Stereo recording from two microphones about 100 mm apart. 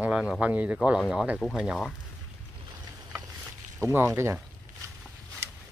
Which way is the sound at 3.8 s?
25° right (ahead or behind).